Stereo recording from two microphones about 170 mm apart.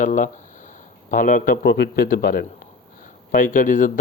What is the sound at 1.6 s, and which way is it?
A man's voice, 75° left (ahead or behind).